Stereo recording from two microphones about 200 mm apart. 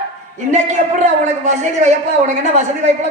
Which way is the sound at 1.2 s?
35° right (ahead or behind).